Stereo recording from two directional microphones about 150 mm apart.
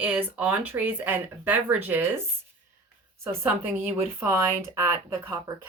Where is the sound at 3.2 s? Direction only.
15° right (ahead or behind).